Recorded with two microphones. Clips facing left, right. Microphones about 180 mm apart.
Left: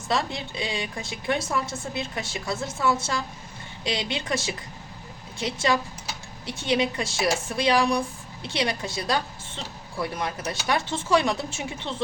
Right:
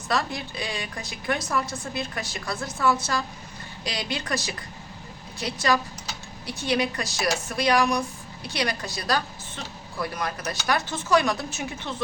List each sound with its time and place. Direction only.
0.1 s a woman's voice: 25° left (ahead or behind)